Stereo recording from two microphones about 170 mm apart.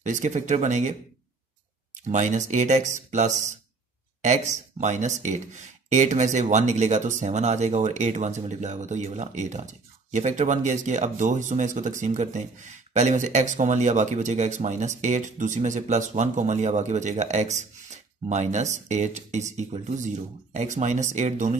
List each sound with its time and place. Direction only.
0.0 s speech: 45° right (ahead or behind)
2.0 s speech: 45° right (ahead or behind)